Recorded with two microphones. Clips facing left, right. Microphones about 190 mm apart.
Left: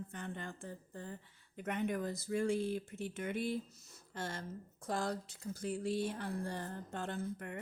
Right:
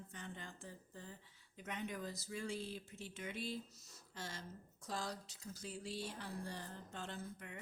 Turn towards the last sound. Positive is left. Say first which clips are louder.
# left 8 dB
turn(degrees=55)  # may be behind; listen again after turning